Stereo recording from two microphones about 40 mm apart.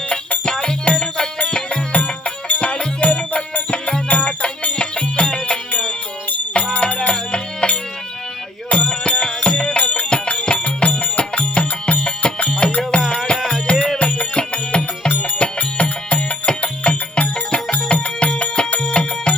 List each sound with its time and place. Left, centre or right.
0.1 s music: left
1.9 s music: left
4.1 s music: left
8.7 s music: left
9.7 s music: left
10.1 s music: left
15.0 s music: left